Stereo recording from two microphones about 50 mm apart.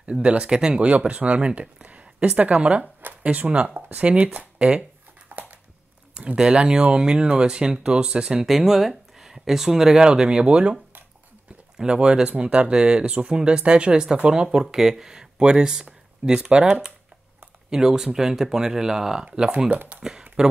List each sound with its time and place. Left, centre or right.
0.0 s speech: right
5.4 s a sound: right
6.1 s speech: centre
11.8 s speech: centre
19.2 s speech: centre